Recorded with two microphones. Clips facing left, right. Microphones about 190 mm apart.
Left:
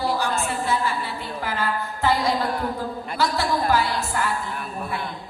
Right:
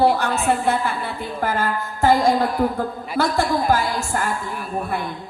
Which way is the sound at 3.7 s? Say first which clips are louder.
Right 2 dB; 45° right (ahead or behind).